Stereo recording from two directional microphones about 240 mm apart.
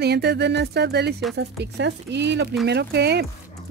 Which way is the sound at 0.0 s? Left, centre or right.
Right.